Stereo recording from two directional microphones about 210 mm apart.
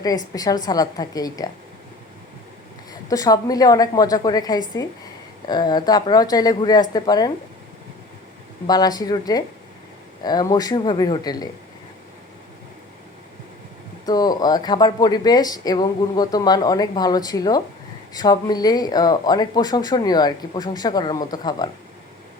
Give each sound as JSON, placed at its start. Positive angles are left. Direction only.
{"t": 0.3, "sound": "a woman's voice", "side_deg": 20}
{"t": 3.1, "sound": "a woman's voice", "side_deg": 15}
{"t": 8.6, "sound": "a woman's voice", "side_deg": 20}
{"t": 14.0, "sound": "speech", "side_deg": 20}